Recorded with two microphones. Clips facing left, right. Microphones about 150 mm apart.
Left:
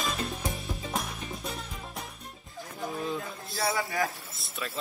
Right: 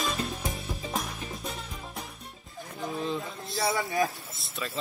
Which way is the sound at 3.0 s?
Centre (ahead or behind).